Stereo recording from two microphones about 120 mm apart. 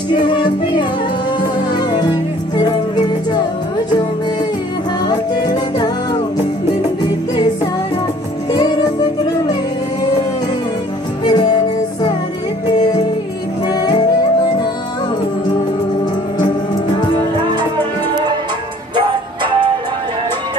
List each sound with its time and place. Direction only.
0.1 s music: 40° left (ahead or behind)
5.0 s music: 35° left (ahead or behind)
8.5 s music: 35° left (ahead or behind)
11.2 s music: 35° left (ahead or behind)
13.7 s music: 35° left (ahead or behind)